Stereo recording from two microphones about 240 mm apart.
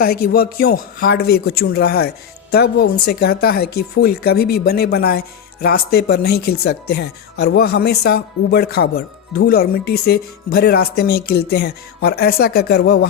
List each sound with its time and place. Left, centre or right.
0.3 s speech: left